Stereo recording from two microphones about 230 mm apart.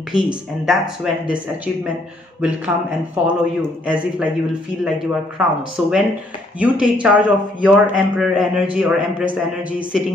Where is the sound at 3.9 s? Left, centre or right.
Centre.